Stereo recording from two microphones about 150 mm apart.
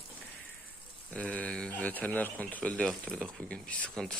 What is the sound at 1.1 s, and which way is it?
Speech, 5° left (ahead or behind).